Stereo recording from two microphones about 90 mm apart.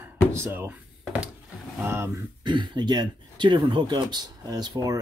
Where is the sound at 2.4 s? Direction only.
60° right (ahead or behind).